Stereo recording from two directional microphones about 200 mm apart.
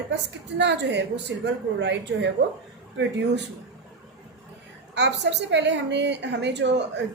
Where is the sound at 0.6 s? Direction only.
60° right (ahead or behind).